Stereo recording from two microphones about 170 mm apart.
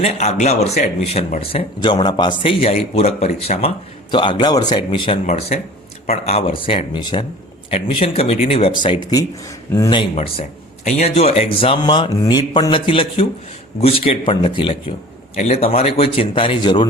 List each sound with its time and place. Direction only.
0.0 s speech: 40° left (ahead or behind)
4.1 s speech: 25° left (ahead or behind)
5.2 s speech: 40° left (ahead or behind); by 10.0 s 20° left (ahead or behind)
10.0 s speech: 35° left (ahead or behind)